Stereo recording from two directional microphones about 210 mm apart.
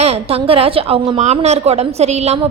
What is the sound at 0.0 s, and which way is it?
A woman's voice, 30° right (ahead or behind).